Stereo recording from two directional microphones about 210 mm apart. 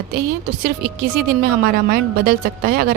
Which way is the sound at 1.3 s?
45° right (ahead or behind).